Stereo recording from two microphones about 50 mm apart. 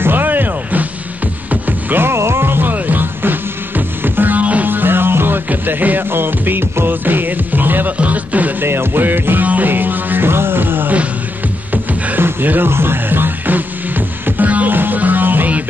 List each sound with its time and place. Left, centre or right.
0.0 s music: right
2.0 s music: right
4.6 s music: right
5.5 s music: right
8.0 s speech: right
8.6 s music: right
12.2 s music: right